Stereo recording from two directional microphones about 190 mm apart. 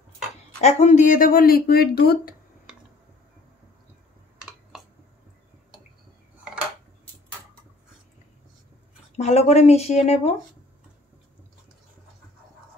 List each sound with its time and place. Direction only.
0.6 s speech: 35° left (ahead or behind); by 2.3 s 55° left (ahead or behind)
9.1 s speech: 35° left (ahead or behind)